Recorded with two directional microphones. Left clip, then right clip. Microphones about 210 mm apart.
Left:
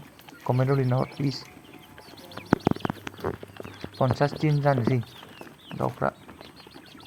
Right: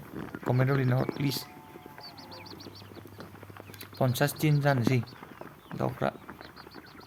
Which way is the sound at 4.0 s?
Centre (ahead or behind).